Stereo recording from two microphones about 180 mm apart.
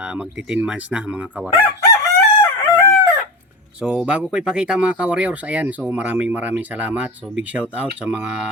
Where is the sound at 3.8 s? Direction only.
5° right (ahead or behind).